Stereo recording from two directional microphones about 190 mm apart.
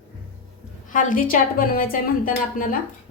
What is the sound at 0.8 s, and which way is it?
A woman's voice, 45° left (ahead or behind).